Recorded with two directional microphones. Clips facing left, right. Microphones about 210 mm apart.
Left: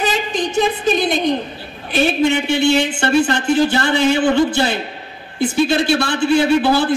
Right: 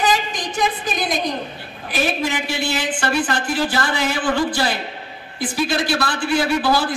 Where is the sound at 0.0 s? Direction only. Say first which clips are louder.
Left 2 dB; 25° left (ahead or behind).